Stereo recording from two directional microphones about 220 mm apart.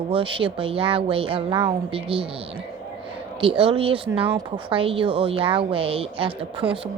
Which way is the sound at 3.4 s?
25° right (ahead or behind).